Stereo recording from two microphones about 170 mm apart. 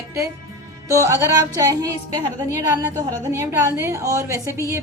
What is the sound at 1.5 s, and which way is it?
Speech, 20° right (ahead or behind).